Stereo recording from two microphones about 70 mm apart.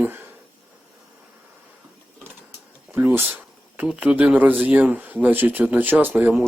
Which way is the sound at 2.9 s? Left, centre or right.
Right.